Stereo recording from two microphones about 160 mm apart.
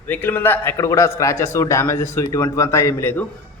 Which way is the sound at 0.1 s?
10° left (ahead or behind).